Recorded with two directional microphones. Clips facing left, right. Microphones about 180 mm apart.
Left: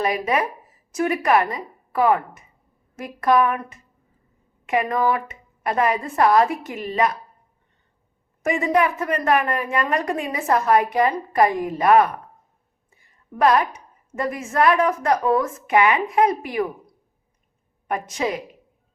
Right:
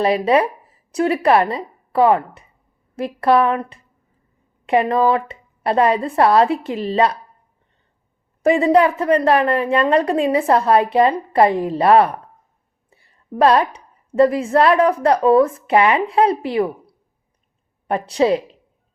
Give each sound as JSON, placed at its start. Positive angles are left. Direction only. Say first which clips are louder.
{"t": 0.0, "sound": "a woman's voice", "louder": "right 6 dB", "side_deg": -30}
{"t": 8.4, "sound": "a woman's voice", "louder": "right 6 dB", "side_deg": -30}
{"t": 17.8, "sound": "a woman's voice", "louder": "right 8 dB", "side_deg": -30}